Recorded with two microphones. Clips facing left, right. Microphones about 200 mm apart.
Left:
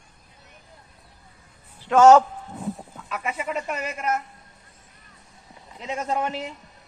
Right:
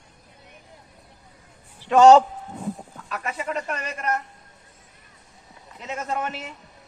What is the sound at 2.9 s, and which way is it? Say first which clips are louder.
Speech: left 1 dB; 5° left (ahead or behind).